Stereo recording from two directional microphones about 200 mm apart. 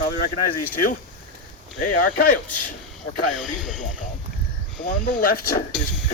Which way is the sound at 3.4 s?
Centre (ahead or behind).